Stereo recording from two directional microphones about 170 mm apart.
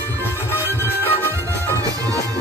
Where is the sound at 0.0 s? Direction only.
10° left (ahead or behind).